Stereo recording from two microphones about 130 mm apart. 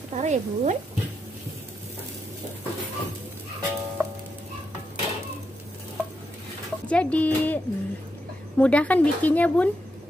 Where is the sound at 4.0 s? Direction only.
20° right (ahead or behind).